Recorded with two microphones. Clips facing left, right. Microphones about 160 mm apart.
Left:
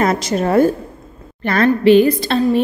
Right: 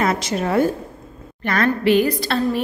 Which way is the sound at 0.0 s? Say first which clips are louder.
Left 4 dB; 40° left (ahead or behind).